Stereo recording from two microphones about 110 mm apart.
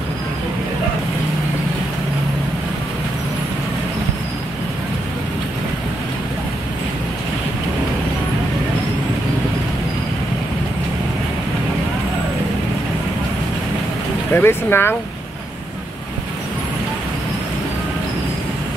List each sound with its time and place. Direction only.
14.3 s speech: 20° left (ahead or behind)